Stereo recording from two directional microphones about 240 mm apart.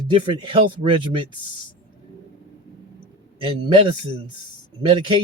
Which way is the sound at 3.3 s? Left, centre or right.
Right.